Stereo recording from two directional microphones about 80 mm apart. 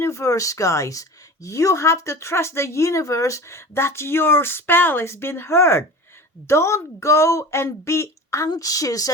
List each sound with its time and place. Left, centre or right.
0.0 s speech: left
8.4 s a woman's voice: left